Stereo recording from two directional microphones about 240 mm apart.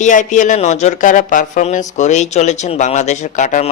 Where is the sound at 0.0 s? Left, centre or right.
Left.